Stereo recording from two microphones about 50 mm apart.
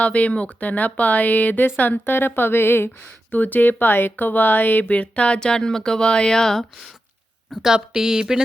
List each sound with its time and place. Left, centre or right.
0.0 s a woman's voice: left
3.3 s speech: left; by 6.7 s centre
7.5 s speech: centre